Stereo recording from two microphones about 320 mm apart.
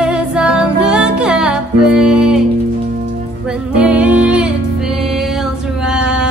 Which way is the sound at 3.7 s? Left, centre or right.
Centre.